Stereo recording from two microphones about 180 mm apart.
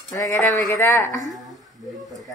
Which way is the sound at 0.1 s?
15° left (ahead or behind).